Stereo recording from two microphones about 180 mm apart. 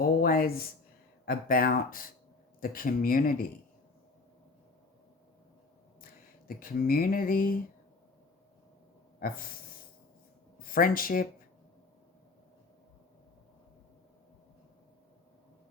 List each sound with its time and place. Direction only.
0.0 s a sound: 55° left (ahead or behind)
1.2 s speech: 55° left (ahead or behind)
6.6 s speech: 55° left (ahead or behind)
9.2 s speech: 55° left (ahead or behind)
10.6 s speech: 50° left (ahead or behind)